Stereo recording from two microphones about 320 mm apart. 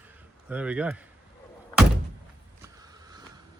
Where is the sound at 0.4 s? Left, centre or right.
Centre.